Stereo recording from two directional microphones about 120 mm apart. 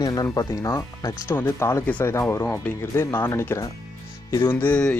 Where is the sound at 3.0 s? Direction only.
20° left (ahead or behind).